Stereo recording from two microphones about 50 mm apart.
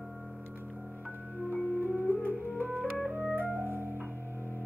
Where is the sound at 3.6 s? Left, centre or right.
Right.